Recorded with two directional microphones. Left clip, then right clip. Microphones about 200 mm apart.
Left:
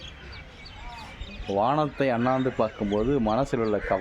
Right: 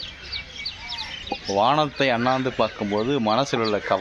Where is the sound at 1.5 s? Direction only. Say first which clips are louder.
Right 4 dB; centre (ahead or behind).